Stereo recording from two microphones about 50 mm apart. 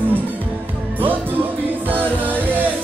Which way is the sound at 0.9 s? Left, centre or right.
Right.